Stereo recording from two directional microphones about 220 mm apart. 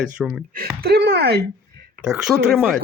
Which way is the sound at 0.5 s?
45° right (ahead or behind).